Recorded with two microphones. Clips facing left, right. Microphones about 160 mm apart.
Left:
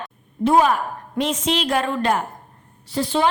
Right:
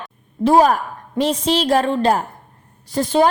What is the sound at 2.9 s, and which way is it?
Speech, 45° right (ahead or behind).